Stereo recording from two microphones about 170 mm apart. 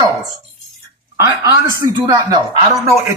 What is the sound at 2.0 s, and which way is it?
Speech, 15° right (ahead or behind).